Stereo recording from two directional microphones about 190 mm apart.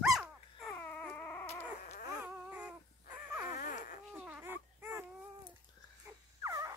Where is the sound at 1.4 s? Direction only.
35° left (ahead or behind).